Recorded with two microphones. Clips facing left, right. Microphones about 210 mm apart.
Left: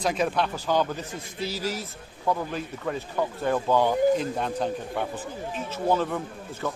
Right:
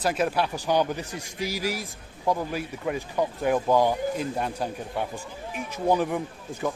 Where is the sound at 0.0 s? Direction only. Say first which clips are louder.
Even; 5° right (ahead or behind).